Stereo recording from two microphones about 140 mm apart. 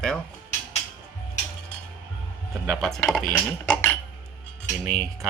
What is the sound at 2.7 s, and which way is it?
Speech, centre (ahead or behind).